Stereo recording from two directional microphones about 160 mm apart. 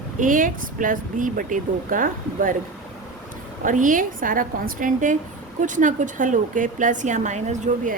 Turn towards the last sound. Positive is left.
turn(degrees=-50)  # may be behind; listen again after turning